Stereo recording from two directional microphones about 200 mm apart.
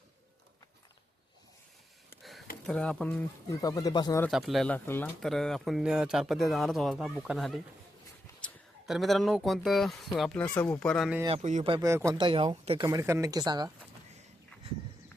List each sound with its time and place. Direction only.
2.6 s speech: 5° left (ahead or behind); by 4.2 s 20° left (ahead or behind)
4.3 s speech: centre (ahead or behind)
11.3 s speech: 30° right (ahead or behind)
11.7 s speech: 15° right (ahead or behind)